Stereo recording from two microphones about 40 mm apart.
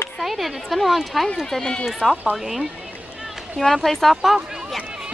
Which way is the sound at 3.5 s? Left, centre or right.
Centre.